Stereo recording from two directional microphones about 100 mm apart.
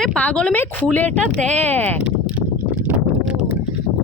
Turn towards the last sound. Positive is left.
turn(degrees=-10)  # may be behind; listen again after turning